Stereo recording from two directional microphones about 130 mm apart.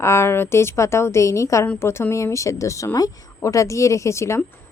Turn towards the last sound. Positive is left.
turn(degrees=20)  # may be behind; listen again after turning